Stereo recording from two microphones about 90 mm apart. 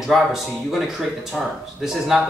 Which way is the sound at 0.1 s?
Centre (ahead or behind).